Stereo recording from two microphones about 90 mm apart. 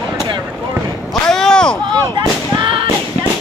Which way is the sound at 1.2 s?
5° left (ahead or behind).